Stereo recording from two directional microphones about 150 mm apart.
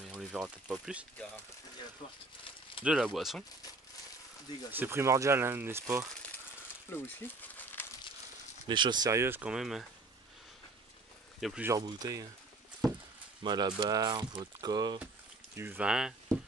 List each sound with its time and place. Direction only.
0.0 s speech: 5° right (ahead or behind)
2.8 s speech: 5° right (ahead or behind)
4.6 s speech: 15° right (ahead or behind)
6.9 s speech: 15° left (ahead or behind)
7.4 s a sound: 10° left (ahead or behind)
8.6 s speech: 30° right (ahead or behind); by 9.8 s 5° right (ahead or behind)
11.6 s speech: 25° right (ahead or behind)
13.4 s speech: 30° right (ahead or behind)
15.5 s speech: 15° right (ahead or behind)